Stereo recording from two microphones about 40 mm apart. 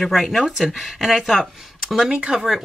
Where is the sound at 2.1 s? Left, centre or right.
Right.